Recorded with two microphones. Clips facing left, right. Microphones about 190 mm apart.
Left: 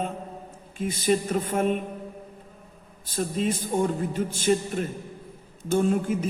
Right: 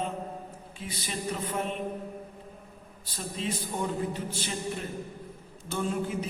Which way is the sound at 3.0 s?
50° left (ahead or behind).